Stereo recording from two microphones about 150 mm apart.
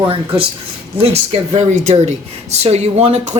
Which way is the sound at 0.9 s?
45° right (ahead or behind).